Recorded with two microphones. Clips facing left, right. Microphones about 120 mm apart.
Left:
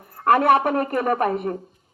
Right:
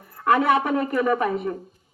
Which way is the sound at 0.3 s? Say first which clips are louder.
Left 2 dB; 55° left (ahead or behind).